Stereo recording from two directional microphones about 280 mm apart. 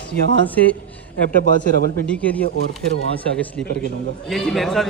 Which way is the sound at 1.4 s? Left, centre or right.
Left.